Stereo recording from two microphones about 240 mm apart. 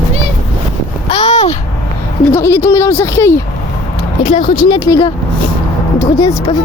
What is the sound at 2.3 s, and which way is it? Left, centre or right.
Speech, centre.